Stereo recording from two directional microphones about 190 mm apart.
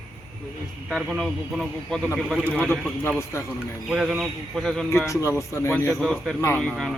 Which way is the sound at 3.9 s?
5° right (ahead or behind).